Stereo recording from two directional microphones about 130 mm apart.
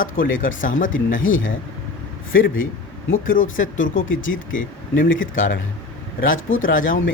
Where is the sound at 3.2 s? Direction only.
90° left.